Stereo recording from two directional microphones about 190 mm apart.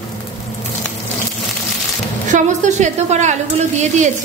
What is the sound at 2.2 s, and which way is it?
A woman's voice, 40° right (ahead or behind).